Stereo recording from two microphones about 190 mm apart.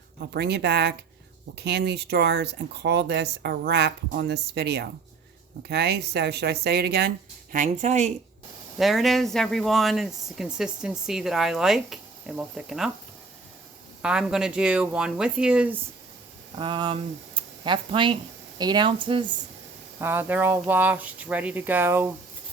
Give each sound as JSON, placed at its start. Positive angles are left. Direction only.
{"t": 0.3, "sound": "speech", "side_deg": -60}
{"t": 7.5, "sound": "a woman's voice", "side_deg": -40}
{"t": 8.8, "sound": "speech", "side_deg": 0}
{"t": 14.0, "sound": "speech", "side_deg": -5}
{"t": 16.6, "sound": "speech", "side_deg": -25}
{"t": 20.0, "sound": "speech", "side_deg": -10}